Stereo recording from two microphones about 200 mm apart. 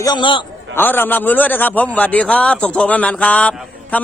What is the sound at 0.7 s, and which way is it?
A man's voice, 10° left (ahead or behind).